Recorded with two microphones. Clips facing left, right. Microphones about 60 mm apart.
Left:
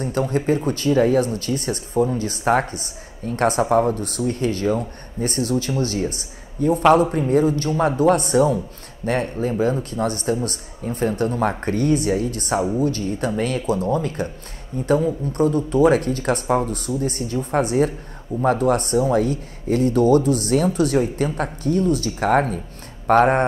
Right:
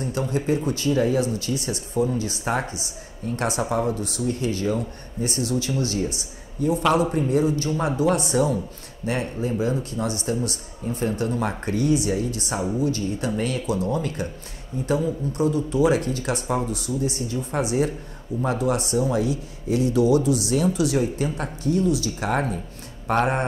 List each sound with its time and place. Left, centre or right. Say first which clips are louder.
0.2 s speech: left 4 dB; left
15.3 s speech: left 4 dB; left